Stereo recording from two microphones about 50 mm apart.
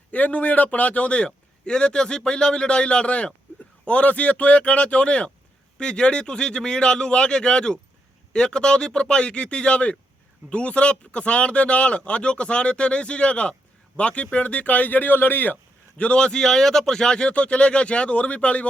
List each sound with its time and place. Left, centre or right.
0.1 s speech: left
16.0 s speech: left